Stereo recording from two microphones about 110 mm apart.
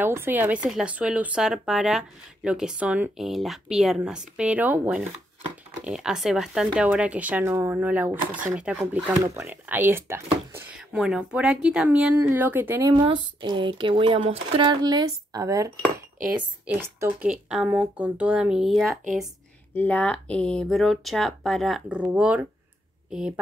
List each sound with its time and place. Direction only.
0.0 s speech: 20° right (ahead or behind)
3.3 s speech: centre (ahead or behind); by 10.2 s 20° right (ahead or behind)
10.9 s speech: 10° right (ahead or behind)
12.8 s speech: 40° right (ahead or behind)
14.8 s speech: 40° right (ahead or behind)
16.3 s speech: 15° right (ahead or behind)
19.7 s speech: 15° left (ahead or behind)
21.8 s speech: 10° right (ahead or behind)